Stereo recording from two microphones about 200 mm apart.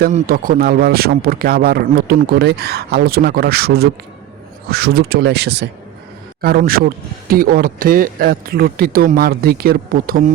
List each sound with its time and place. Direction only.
0.0 s speech: 45° right (ahead or behind)